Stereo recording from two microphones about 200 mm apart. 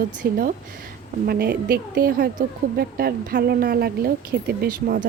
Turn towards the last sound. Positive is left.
turn(degrees=-45)  # may be behind; listen again after turning